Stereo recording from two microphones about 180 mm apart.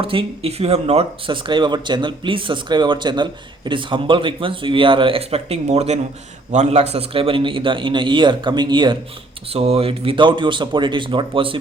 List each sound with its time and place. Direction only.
0.0 s speech: 30° right (ahead or behind)